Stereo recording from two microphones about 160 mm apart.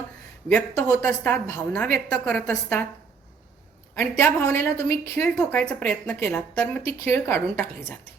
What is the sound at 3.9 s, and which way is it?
A woman's voice, 15° left (ahead or behind).